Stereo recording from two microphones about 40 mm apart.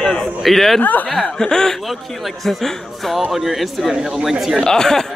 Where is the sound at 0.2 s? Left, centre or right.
Centre.